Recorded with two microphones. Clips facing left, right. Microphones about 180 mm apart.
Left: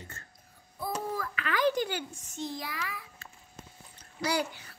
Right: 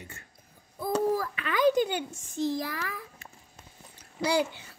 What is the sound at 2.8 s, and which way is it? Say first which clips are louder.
Speech: right 3 dB; 45° right (ahead or behind).